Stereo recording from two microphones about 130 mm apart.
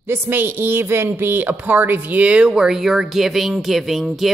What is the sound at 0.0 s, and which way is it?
Speech, 15° right (ahead or behind).